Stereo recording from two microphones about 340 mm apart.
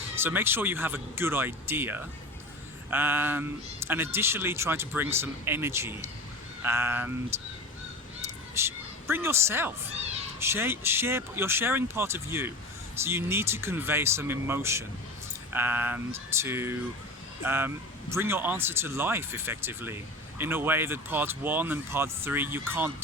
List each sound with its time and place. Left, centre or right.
0.2 s speech: centre
8.5 s speech: centre